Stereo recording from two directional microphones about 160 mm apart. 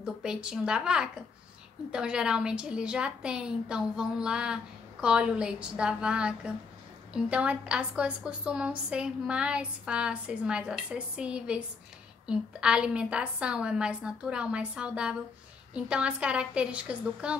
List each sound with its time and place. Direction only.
0.0 s a woman's voice: 5° right (ahead or behind)